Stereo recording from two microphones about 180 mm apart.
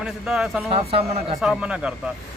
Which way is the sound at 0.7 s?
30° right (ahead or behind).